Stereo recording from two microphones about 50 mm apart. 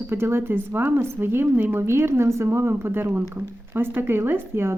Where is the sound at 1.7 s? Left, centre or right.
Right.